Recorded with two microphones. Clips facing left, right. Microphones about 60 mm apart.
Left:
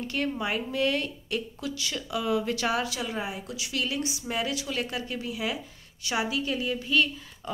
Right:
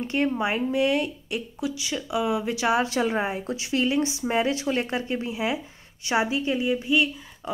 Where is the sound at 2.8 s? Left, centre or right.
Right.